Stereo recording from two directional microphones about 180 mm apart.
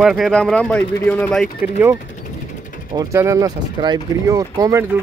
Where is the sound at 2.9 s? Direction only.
15° right (ahead or behind).